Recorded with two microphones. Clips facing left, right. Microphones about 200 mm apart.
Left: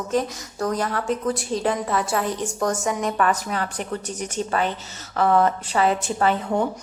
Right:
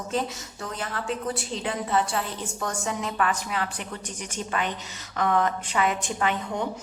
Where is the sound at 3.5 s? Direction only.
40° left (ahead or behind).